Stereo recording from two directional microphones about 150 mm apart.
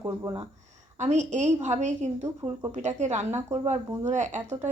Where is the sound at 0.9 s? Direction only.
50° right (ahead or behind).